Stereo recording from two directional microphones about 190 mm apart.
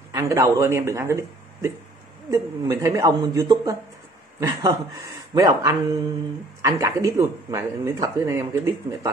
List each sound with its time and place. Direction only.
0.1 s speech: 15° right (ahead or behind)